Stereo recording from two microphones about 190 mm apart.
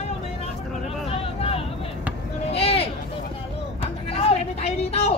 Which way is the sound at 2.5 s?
30° left (ahead or behind).